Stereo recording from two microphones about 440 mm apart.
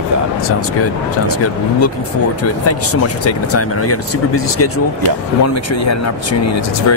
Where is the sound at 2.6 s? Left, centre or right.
Left.